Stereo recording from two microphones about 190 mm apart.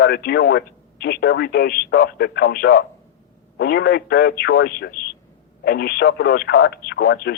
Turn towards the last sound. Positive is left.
turn(degrees=55)  # may be behind; listen again after turning